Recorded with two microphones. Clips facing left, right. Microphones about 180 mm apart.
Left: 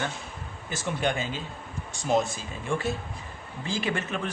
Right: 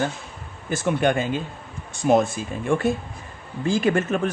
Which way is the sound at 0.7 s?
55° right (ahead or behind).